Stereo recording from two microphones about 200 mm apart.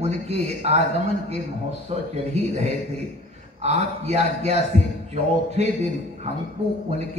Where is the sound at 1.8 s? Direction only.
30° right (ahead or behind).